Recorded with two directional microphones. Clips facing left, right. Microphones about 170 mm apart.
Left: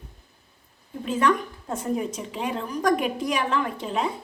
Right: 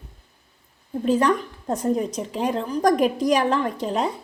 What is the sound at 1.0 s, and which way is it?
A woman's voice, 35° right (ahead or behind).